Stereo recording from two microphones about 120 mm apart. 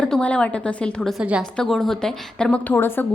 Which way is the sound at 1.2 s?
10° right (ahead or behind).